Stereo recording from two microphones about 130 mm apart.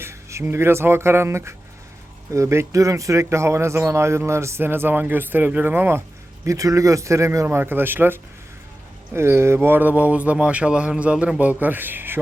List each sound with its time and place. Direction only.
0.0 s speech: 20° right (ahead or behind)